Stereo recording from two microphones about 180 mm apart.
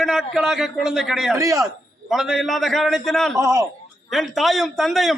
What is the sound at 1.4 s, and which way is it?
Speech, 15° right (ahead or behind).